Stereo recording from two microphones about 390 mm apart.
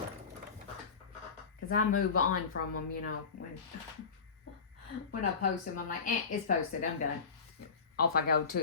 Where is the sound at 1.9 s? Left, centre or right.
Left.